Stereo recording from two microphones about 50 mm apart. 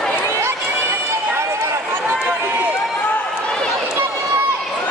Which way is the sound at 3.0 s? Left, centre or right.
Left.